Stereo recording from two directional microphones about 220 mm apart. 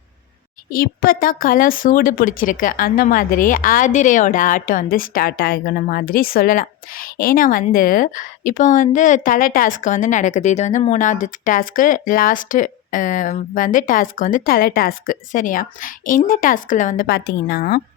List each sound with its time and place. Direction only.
0.7 s a woman's voice: 40° left (ahead or behind)